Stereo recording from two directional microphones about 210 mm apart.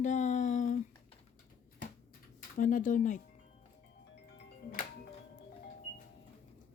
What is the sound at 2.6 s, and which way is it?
Speech, 40° left (ahead or behind).